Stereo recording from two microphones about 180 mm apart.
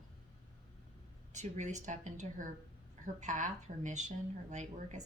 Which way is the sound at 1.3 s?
40° right (ahead or behind).